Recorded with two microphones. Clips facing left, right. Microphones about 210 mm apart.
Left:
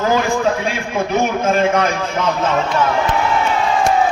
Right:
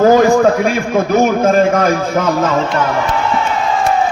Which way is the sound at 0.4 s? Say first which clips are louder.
Right 6 dB; 45° right (ahead or behind).